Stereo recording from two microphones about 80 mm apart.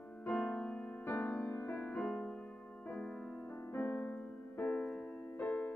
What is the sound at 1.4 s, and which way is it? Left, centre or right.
Music, left.